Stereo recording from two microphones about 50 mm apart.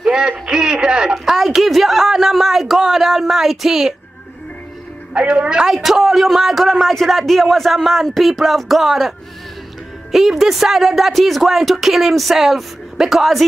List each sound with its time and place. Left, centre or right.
0.0 s speech: centre
1.1 s a man's voice: centre
5.1 s a woman's voice: right
5.7 s a man's voice: centre
10.1 s a man's voice: centre